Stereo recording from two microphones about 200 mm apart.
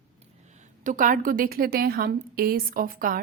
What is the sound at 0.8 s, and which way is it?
A woman's voice, 40° right (ahead or behind).